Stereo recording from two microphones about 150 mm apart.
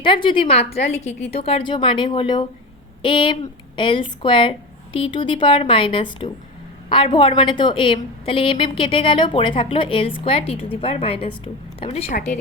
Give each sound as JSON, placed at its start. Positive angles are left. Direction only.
{"t": 0.0, "sound": "a woman's voice", "side_deg": 35}